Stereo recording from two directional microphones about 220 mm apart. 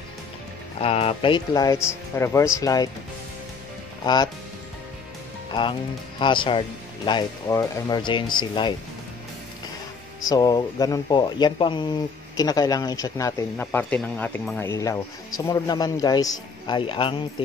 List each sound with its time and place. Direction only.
0.7 s speech: 25° left (ahead or behind)
4.0 s speech: 20° left (ahead or behind)
5.5 s speech: 20° left (ahead or behind)
10.2 s speech: 15° left (ahead or behind)